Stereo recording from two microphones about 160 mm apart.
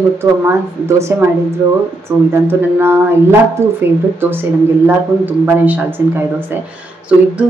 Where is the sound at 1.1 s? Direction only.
15° right (ahead or behind).